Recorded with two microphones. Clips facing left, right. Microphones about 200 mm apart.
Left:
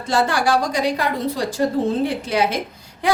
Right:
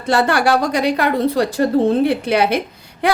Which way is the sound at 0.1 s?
60° right (ahead or behind).